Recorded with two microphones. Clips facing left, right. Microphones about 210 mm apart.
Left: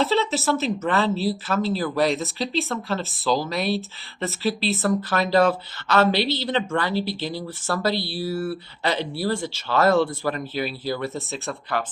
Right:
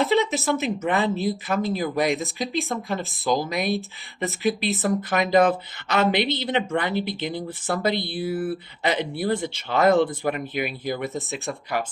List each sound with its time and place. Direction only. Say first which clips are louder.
0.0 s speech: right 1 dB; 15° right (ahead or behind)